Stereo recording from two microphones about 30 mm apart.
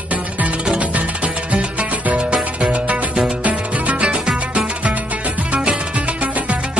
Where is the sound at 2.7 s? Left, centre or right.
Right.